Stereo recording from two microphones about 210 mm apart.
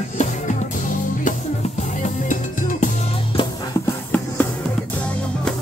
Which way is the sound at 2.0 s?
35° left (ahead or behind).